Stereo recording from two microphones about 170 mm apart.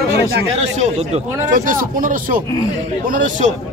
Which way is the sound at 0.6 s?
40° right (ahead or behind).